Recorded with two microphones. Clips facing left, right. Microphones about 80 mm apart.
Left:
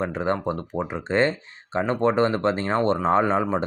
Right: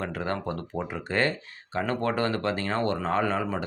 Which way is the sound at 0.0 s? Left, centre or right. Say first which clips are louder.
Left 6 dB; left.